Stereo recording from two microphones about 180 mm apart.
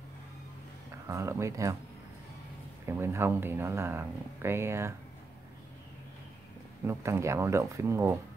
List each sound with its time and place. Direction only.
1.0 s speech: 15° right (ahead or behind)
3.0 s speech: 15° right (ahead or behind)
6.9 s speech: 15° right (ahead or behind)